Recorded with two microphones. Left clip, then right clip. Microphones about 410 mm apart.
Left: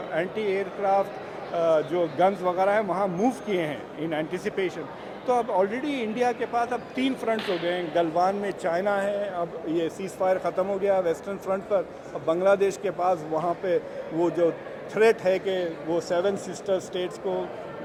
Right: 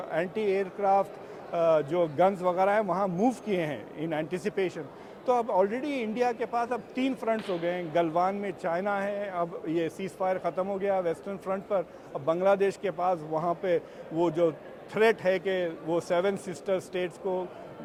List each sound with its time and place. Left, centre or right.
0.1 s a man's voice: right